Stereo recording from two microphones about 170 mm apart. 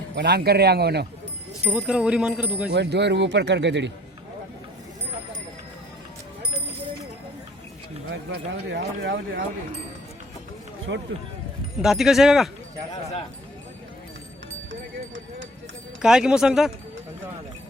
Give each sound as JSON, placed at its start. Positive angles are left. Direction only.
{"t": 0.2, "sound": "speech", "side_deg": -75}
{"t": 1.6, "sound": "speech", "side_deg": -5}
{"t": 2.7, "sound": "speech", "side_deg": -85}
{"t": 8.1, "sound": "speech", "side_deg": -80}
{"t": 10.9, "sound": "speech", "side_deg": -90}
{"t": 11.8, "sound": "speech", "side_deg": 0}
{"t": 16.0, "sound": "speech", "side_deg": -5}